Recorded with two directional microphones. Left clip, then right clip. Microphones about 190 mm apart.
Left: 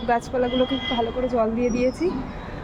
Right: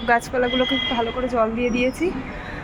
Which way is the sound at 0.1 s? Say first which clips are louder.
Right 3 dB; centre (ahead or behind).